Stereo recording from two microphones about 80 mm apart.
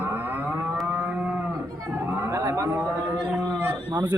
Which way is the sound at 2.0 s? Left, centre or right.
Right.